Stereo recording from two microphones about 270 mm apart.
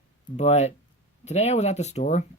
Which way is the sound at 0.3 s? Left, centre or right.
Left.